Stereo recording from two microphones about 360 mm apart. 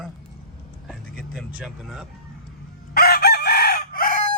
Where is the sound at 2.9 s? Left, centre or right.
Left.